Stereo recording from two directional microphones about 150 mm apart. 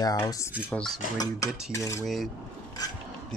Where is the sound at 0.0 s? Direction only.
25° left (ahead or behind).